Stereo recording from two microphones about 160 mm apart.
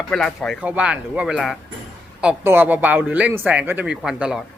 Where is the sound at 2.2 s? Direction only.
10° right (ahead or behind).